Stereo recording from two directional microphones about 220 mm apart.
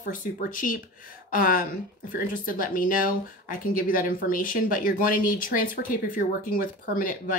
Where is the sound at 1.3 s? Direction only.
40° left (ahead or behind).